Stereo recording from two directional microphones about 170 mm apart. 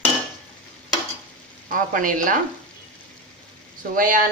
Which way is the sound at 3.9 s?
55° right (ahead or behind).